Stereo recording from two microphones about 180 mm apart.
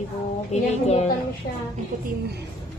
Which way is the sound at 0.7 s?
40° left (ahead or behind).